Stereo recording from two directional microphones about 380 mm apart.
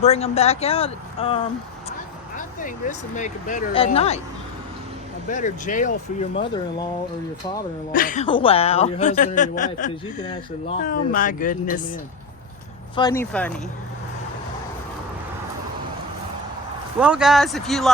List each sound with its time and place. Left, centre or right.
0.0 s speech: centre
5.3 s speech: centre
7.9 s speech: centre
13.0 s speech: centre
17.0 s speech: centre